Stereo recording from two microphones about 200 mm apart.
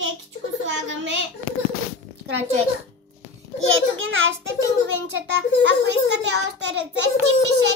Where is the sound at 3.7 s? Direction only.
75° right (ahead or behind).